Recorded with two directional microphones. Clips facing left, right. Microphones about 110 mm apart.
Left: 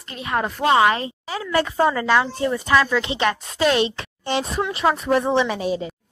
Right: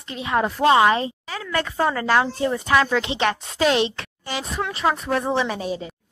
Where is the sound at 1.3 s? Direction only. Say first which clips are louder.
Left 4 dB; 15° left (ahead or behind).